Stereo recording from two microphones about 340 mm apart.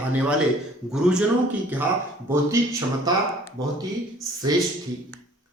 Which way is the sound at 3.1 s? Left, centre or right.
Centre.